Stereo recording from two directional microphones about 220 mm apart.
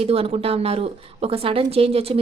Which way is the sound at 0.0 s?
25° right (ahead or behind).